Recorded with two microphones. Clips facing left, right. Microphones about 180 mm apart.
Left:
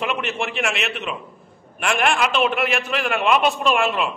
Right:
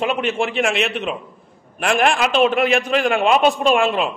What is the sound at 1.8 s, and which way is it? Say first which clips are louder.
A man's voice: right 3 dB; 35° right (ahead or behind).